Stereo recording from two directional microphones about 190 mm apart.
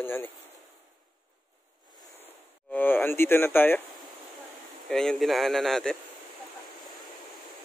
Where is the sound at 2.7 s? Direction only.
10° left (ahead or behind).